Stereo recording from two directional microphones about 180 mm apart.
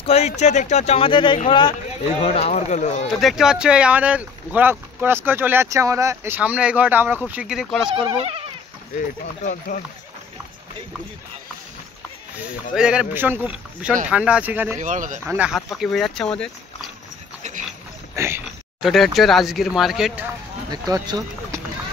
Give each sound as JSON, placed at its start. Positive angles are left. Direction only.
{"t": 0.0, "sound": "speech", "side_deg": 35}
{"t": 3.1, "sound": "speech", "side_deg": 0}
{"t": 7.9, "sound": "speech", "side_deg": -30}
{"t": 8.9, "sound": "speech", "side_deg": 50}
{"t": 12.7, "sound": "speech", "side_deg": -5}
{"t": 14.8, "sound": "speech", "side_deg": -45}
{"t": 15.2, "sound": "speech", "side_deg": -5}
{"t": 17.4, "sound": "a sound", "side_deg": -40}
{"t": 18.1, "sound": "speech", "side_deg": -15}
{"t": 18.8, "sound": "speech", "side_deg": 0}
{"t": 20.7, "sound": "speech", "side_deg": -20}